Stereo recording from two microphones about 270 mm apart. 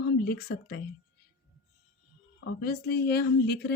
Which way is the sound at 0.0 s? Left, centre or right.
Left.